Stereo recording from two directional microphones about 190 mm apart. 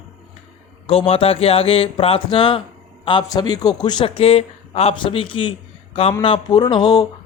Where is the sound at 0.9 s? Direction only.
30° left (ahead or behind).